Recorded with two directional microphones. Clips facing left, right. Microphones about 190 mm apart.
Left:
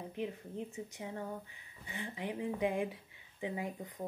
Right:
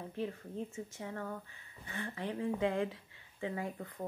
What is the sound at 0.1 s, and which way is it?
Speech, 15° left (ahead or behind).